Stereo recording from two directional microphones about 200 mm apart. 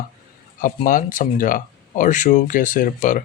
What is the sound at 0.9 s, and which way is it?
Speech, 40° left (ahead or behind).